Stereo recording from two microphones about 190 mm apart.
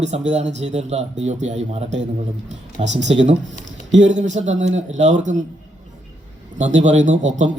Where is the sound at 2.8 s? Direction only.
70° right (ahead or behind).